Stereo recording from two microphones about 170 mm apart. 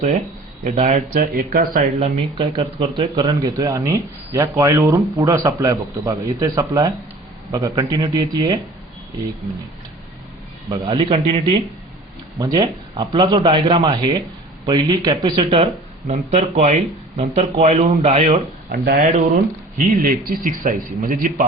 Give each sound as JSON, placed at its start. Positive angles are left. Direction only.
{"t": 0.6, "sound": "speech", "side_deg": -45}
{"t": 2.6, "sound": "speech", "side_deg": -30}
{"t": 10.7, "sound": "speech", "side_deg": -30}
{"t": 18.7, "sound": "a man's voice", "side_deg": -60}